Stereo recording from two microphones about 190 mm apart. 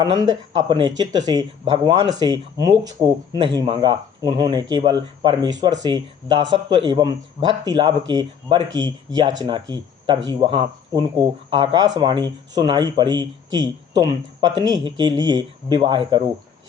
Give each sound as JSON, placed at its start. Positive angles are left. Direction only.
{"t": 0.0, "sound": "speech", "side_deg": -20}